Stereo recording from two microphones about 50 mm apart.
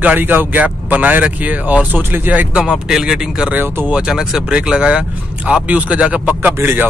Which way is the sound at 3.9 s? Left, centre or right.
Centre.